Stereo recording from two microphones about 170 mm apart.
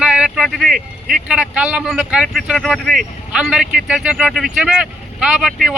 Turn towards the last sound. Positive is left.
turn(degrees=-5)  # may be behind; listen again after turning